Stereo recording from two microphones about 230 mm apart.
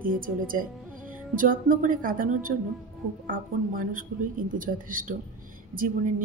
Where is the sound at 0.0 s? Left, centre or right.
Right.